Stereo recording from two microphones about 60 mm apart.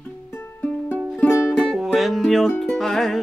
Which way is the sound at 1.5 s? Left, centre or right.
Centre.